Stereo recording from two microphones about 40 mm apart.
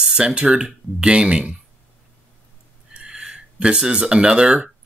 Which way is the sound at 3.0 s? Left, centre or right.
Right.